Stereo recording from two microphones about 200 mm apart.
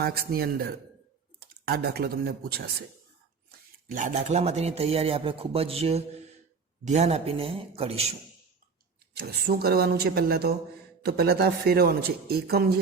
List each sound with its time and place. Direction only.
0.0 s a man's voice: 50° right (ahead or behind)
3.8 s speech: 40° right (ahead or behind)
9.2 s a man's voice: 50° right (ahead or behind)